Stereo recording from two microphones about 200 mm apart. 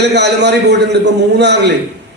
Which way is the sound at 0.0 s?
60° right (ahead or behind).